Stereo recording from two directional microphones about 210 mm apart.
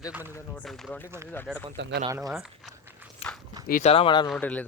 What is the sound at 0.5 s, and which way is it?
Speech, centre (ahead or behind).